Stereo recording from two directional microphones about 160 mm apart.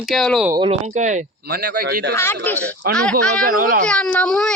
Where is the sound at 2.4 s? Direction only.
10° left (ahead or behind).